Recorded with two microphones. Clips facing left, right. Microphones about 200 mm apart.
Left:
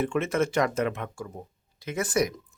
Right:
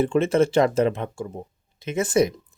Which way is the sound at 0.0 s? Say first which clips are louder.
Right 6 dB; 30° right (ahead or behind).